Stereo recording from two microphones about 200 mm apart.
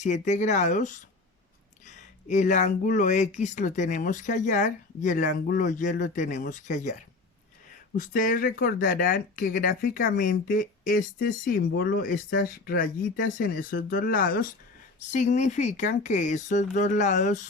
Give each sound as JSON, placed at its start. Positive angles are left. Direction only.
{"t": 0.0, "sound": "speech", "side_deg": 35}
{"t": 7.9, "sound": "speech", "side_deg": 40}